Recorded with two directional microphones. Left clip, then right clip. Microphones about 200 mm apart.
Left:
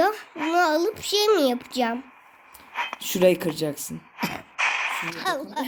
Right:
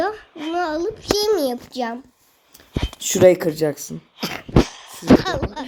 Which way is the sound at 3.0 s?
40° right (ahead or behind).